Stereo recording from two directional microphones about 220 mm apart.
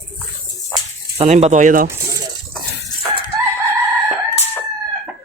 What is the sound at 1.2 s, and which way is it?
Speech, 30° right (ahead or behind).